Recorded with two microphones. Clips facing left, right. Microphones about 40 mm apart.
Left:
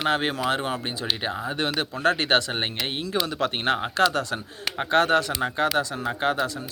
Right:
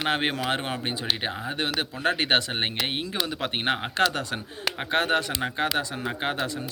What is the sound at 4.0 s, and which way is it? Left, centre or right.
Speech, right.